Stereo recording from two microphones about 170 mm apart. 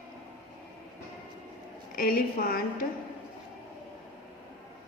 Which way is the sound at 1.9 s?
60° left (ahead or behind).